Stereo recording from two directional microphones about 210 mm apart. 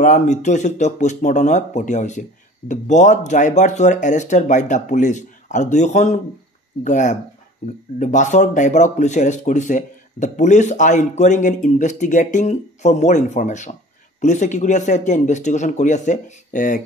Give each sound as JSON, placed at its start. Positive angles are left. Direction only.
{"t": 0.0, "sound": "speech", "side_deg": 35}